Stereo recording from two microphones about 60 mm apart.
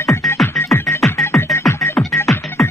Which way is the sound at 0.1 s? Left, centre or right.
Left.